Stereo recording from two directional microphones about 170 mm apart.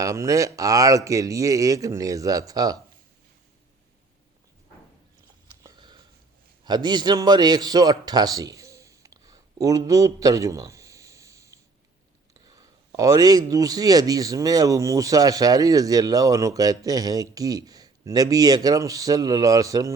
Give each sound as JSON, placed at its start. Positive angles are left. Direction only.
{"t": 0.0, "sound": "a man's voice", "side_deg": -20}
{"t": 5.6, "sound": "sniff", "side_deg": -25}
{"t": 6.7, "sound": "a man's voice", "side_deg": -25}